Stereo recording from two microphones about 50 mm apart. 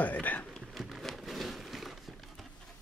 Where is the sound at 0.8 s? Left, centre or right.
Centre.